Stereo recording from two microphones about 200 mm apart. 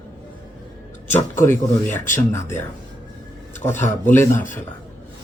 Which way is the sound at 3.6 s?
10° left (ahead or behind).